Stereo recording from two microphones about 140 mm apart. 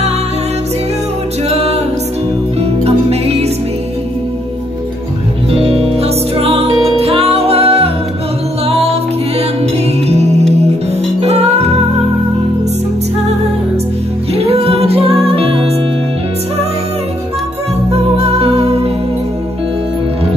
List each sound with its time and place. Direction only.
1.5 s music: 45° right (ahead or behind)
5.5 s music: 45° right (ahead or behind)
11.1 s music: 50° right (ahead or behind)
14.3 s music: 45° right (ahead or behind)
17.9 s music: 45° right (ahead or behind)